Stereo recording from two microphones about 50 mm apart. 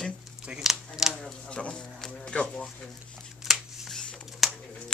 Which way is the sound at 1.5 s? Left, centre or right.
Centre.